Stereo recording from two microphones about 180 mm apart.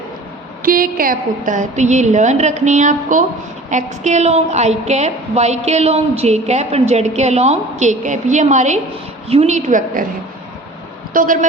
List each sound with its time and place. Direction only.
0.6 s a woman's voice: 55° right (ahead or behind)
11.1 s speech: 50° right (ahead or behind)